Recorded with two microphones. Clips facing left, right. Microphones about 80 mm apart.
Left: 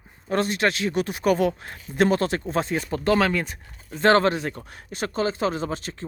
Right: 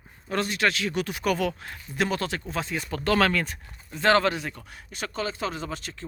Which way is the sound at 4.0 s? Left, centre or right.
Left.